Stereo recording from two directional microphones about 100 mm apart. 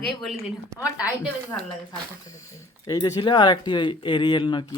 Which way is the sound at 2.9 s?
40° left (ahead or behind).